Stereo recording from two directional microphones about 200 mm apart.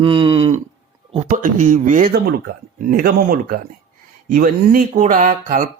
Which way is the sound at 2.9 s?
45° right (ahead or behind).